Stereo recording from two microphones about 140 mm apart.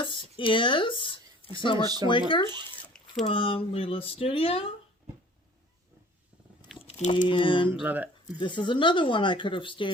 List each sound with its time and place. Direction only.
0.0 s a sound: 35° left (ahead or behind)
1.5 s speech: 35° left (ahead or behind)
6.7 s a sound: 40° left (ahead or behind)
7.3 s speech: 35° left (ahead or behind)
7.7 s speech: 15° right (ahead or behind)
8.4 s speech: 35° left (ahead or behind)